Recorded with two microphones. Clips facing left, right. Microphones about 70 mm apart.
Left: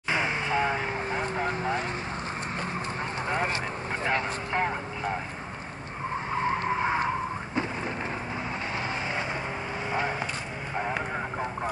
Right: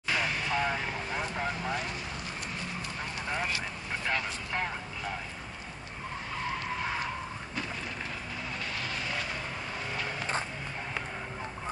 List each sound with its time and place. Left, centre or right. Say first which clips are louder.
0.1 s vehicle: left 3 dB; left
3.3 s vehicle: left 5 dB; left
6.3 s skidding: left 8 dB; left